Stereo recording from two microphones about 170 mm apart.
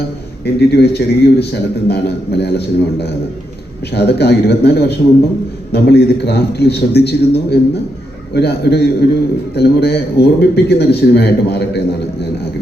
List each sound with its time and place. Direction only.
0.4 s a man's voice: 75° left (ahead or behind)